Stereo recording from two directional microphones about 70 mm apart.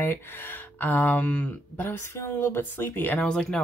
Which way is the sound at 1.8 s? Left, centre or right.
Left.